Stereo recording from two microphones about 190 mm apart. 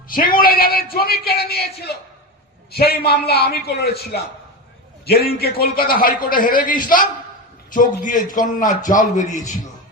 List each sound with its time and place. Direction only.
0.1 s a man's voice: 50° left (ahead or behind)
7.7 s a man's voice: 45° left (ahead or behind)